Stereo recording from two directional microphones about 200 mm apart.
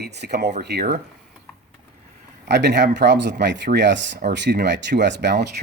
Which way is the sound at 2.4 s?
60° right (ahead or behind).